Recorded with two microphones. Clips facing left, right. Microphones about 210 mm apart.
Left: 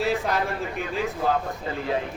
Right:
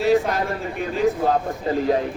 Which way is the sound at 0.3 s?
35° right (ahead or behind).